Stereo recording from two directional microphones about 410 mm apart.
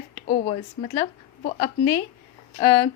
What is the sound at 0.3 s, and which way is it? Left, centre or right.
A woman's voice, centre.